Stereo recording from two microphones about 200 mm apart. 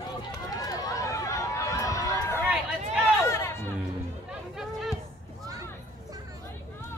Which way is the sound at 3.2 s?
15° left (ahead or behind).